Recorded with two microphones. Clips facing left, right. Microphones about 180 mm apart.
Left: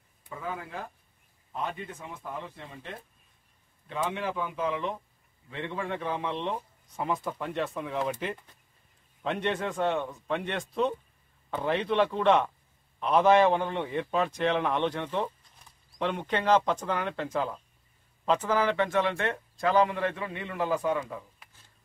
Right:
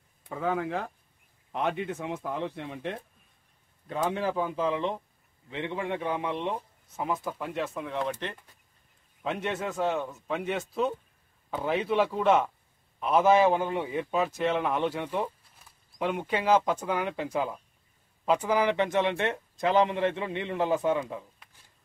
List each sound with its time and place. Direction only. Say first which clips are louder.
0.4 s a man's voice: right 8 dB; 75° right (ahead or behind)
3.8 s a man's voice: right 3 dB; 40° right (ahead or behind); by 21.2 s 20° right (ahead or behind)